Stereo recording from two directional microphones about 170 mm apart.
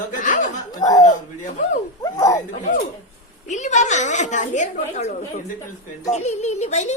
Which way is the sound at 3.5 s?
45° left (ahead or behind).